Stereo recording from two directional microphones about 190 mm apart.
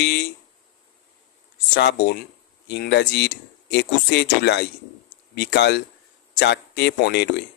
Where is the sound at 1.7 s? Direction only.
60° left (ahead or behind).